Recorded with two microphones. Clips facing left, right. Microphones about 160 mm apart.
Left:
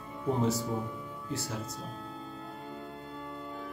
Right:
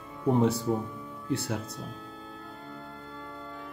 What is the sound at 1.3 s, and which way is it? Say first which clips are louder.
Speech: right 6 dB; 60° right (ahead or behind).